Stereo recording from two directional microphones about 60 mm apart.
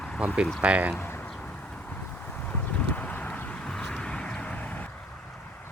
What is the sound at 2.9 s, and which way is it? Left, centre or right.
Vehicle, left.